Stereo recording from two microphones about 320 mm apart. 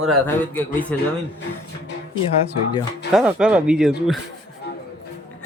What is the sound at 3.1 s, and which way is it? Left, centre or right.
Speech, centre.